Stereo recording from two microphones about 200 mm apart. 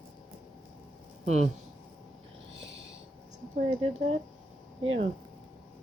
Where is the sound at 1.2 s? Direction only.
35° right (ahead or behind).